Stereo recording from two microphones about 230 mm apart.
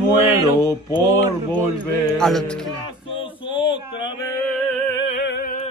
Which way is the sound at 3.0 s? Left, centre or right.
Left.